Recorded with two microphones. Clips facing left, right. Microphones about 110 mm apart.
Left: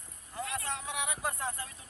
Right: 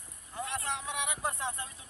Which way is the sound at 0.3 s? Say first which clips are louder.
Right 1 dB; 25° right (ahead or behind).